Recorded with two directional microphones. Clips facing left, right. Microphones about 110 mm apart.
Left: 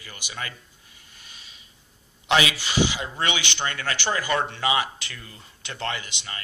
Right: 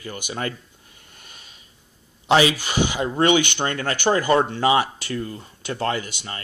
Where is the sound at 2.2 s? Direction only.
35° right (ahead or behind).